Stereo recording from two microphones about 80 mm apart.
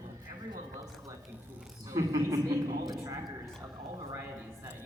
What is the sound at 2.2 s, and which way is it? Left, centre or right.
Speech, right.